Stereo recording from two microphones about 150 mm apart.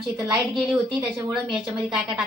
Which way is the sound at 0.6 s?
5° right (ahead or behind).